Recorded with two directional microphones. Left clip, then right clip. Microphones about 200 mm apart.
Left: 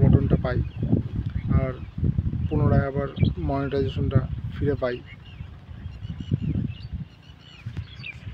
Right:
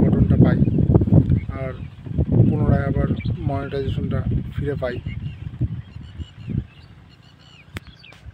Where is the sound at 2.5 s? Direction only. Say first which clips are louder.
Right 2 dB; 5° right (ahead or behind).